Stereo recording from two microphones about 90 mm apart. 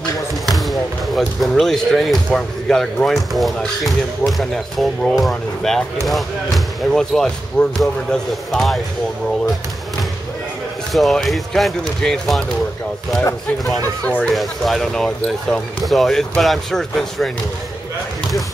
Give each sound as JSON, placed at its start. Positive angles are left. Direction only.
{"t": 0.5, "sound": "speech", "side_deg": 0}
{"t": 10.9, "sound": "speech", "side_deg": 0}
{"t": 14.0, "sound": "speech", "side_deg": 15}
{"t": 14.3, "sound": "speech", "side_deg": 0}